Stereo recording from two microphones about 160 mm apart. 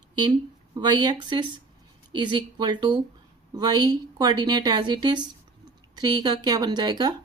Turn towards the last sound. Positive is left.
turn(degrees=-25)  # may be behind; listen again after turning